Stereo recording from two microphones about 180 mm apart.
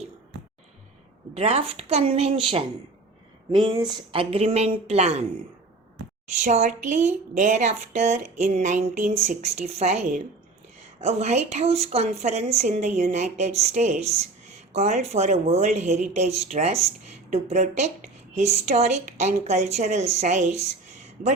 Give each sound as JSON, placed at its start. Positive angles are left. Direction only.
{"t": 1.3, "sound": "a woman's voice", "side_deg": -35}
{"t": 6.4, "sound": "a woman's voice", "side_deg": -40}